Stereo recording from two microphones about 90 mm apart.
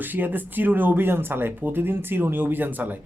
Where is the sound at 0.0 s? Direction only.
20° right (ahead or behind).